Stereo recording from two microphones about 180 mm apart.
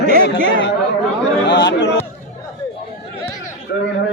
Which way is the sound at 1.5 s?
70° left (ahead or behind).